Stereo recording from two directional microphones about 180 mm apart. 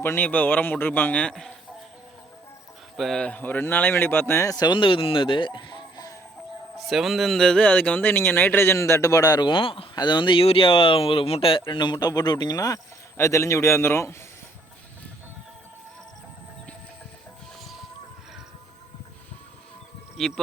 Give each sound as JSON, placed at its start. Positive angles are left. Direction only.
{"t": 0.0, "sound": "speech", "side_deg": 10}
{"t": 2.9, "sound": "speech", "side_deg": 0}
{"t": 6.7, "sound": "speech", "side_deg": 0}
{"t": 20.1, "sound": "speech", "side_deg": 0}